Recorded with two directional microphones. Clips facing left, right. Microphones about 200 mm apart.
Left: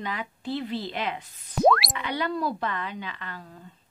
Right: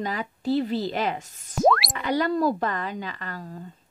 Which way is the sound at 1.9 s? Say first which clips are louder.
Right 5 dB; 40° right (ahead or behind).